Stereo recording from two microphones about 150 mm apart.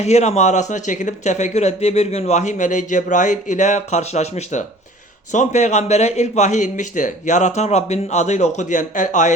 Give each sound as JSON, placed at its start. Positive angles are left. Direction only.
{"t": 0.0, "sound": "speech", "side_deg": 50}